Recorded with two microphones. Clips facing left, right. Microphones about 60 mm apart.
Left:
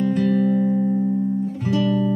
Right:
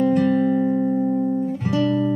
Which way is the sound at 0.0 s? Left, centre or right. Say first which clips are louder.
Right 2 dB; centre.